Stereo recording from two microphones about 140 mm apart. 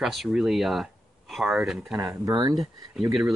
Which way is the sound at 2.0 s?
25° right (ahead or behind).